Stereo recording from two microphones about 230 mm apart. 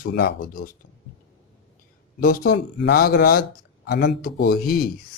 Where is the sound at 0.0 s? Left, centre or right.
Left.